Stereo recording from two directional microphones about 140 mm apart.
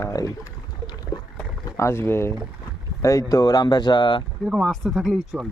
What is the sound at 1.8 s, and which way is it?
Speech, 20° left (ahead or behind).